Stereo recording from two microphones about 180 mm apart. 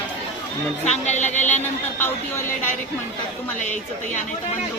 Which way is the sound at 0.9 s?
40° left (ahead or behind).